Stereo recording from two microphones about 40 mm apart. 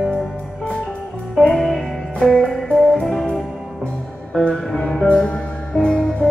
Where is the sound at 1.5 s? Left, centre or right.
Centre.